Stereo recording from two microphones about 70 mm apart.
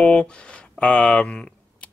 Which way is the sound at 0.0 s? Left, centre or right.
Centre.